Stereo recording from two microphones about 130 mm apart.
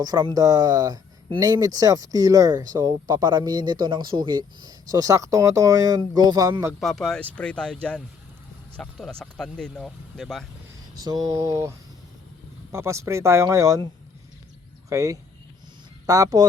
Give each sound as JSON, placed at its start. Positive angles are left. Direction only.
{"t": 0.0, "sound": "speech", "side_deg": -30}
{"t": 6.5, "sound": "speech", "side_deg": -20}
{"t": 6.7, "sound": "speech", "side_deg": 0}
{"t": 10.9, "sound": "speech", "side_deg": -30}
{"t": 14.8, "sound": "speech", "side_deg": -25}